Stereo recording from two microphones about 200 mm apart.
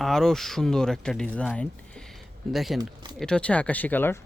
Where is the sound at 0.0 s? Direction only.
Centre (ahead or behind).